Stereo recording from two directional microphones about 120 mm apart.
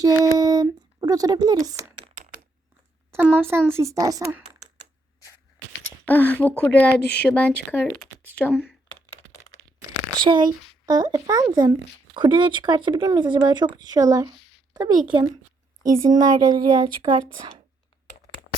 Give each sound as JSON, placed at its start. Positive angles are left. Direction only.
{"t": 0.0, "sound": "speech", "side_deg": -35}
{"t": 3.1, "sound": "speech", "side_deg": -15}
{"t": 6.1, "sound": "speech", "side_deg": 15}
{"t": 10.2, "sound": "speech", "side_deg": -35}